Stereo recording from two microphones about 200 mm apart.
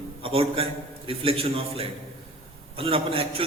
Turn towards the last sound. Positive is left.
turn(degrees=-30)  # may be behind; listen again after turning